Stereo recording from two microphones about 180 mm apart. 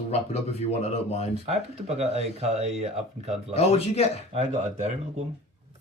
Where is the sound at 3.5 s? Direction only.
35° left (ahead or behind).